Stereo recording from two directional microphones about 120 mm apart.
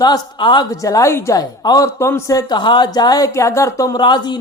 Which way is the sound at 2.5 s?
40° left (ahead or behind).